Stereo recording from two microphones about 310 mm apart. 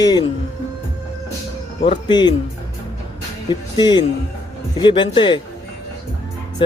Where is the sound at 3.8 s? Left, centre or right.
Centre.